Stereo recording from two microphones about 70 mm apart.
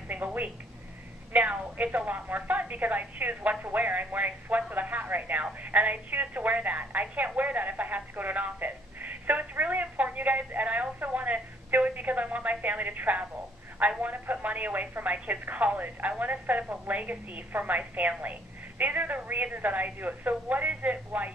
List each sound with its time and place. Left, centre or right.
0.1 s speech: right